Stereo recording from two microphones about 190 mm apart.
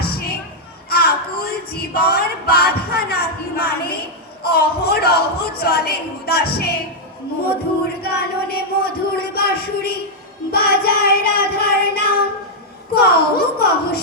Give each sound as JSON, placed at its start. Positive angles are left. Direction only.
{"t": 0.0, "sound": "a sound", "side_deg": 55}
{"t": 4.4, "sound": "a woman's voice", "side_deg": 55}
{"t": 8.0, "sound": "speech", "side_deg": 55}
{"t": 10.5, "sound": "child singing", "side_deg": 55}
{"t": 12.9, "sound": "a woman's voice", "side_deg": 55}